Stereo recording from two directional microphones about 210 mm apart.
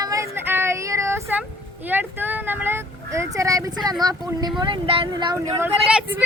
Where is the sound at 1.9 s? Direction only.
10° right (ahead or behind).